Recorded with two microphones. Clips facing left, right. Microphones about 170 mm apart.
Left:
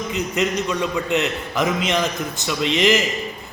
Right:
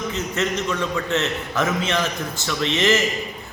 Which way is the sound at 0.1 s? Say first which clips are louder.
Left 5 dB; 15° left (ahead or behind).